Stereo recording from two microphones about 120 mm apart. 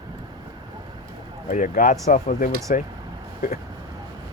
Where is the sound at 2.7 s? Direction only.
90° left.